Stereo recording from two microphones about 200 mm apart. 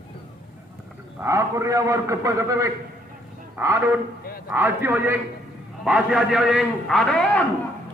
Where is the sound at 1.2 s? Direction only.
15° right (ahead or behind); by 7.4 s 5° left (ahead or behind).